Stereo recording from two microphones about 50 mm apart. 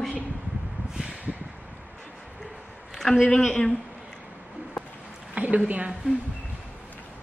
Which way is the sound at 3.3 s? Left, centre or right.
Centre.